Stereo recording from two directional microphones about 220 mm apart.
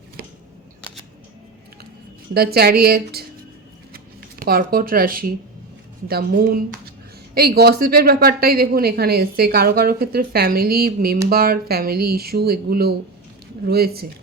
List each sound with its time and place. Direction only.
2.3 s a woman's voice: 45° right (ahead or behind)
3.9 s a sound: 45° right (ahead or behind)
6.1 s a woman's voice: 45° right (ahead or behind)